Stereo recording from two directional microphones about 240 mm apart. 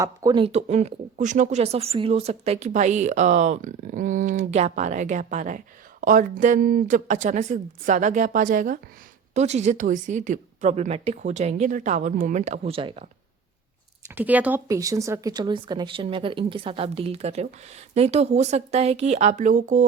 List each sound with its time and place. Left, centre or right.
0.0 s a woman's voice: centre
14.2 s a woman's voice: centre; by 19.9 s right